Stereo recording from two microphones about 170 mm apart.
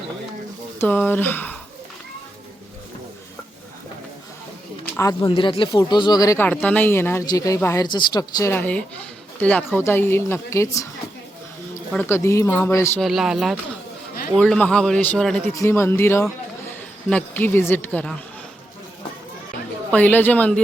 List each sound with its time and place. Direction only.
0.8 s a woman's voice: 10° left (ahead or behind)
4.9 s speech: 20° left (ahead or behind)
5.3 s speech: 30° left (ahead or behind)
8.5 s a woman's voice: 10° left (ahead or behind)
12.0 s a woman's voice: 15° left (ahead or behind)
13.0 s a man's voice: centre (ahead or behind)
19.9 s a woman's voice: 10° left (ahead or behind)